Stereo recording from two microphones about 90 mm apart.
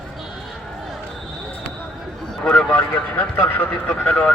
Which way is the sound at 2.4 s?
10° left (ahead or behind).